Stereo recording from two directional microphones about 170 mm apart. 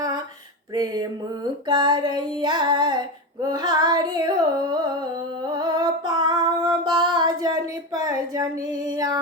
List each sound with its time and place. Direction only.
1.6 s female singing: 25° right (ahead or behind)